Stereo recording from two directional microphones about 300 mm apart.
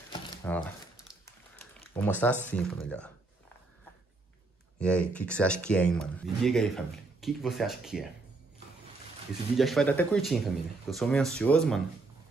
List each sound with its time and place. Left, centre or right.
0.1 s crumpling: centre
2.6 s speech: centre
4.7 s speech: centre
9.6 s speech: centre